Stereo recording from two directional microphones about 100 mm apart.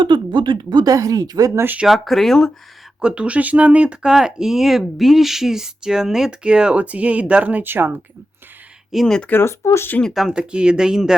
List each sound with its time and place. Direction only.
0.0 s speech: 50° right (ahead or behind)
0.9 s speech: 35° right (ahead or behind)
1.6 s speech: 15° right (ahead or behind)
1.9 s speech: centre (ahead or behind)
3.0 s speech: 10° right (ahead or behind)
8.9 s speech: centre (ahead or behind)
9.3 s speech: 25° left (ahead or behind)
10.0 s speech: 5° right (ahead or behind)